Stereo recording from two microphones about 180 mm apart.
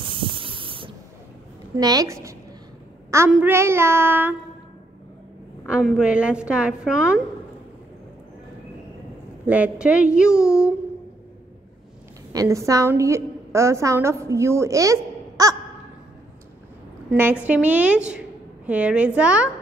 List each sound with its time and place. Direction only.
0.0 s spray: 30° right (ahead or behind)
1.8 s a woman's voice: 20° right (ahead or behind)
5.7 s a woman's voice: 5° right (ahead or behind)
9.5 s a woman's voice: 5° right (ahead or behind)
12.3 s a woman's voice: 20° right (ahead or behind)
17.1 s a woman's voice: 10° right (ahead or behind)